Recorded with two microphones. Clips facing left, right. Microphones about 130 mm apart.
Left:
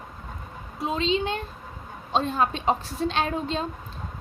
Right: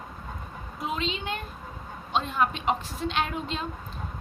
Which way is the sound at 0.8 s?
30° left (ahead or behind).